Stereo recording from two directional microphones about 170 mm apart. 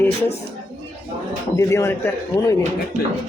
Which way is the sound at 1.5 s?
15° left (ahead or behind).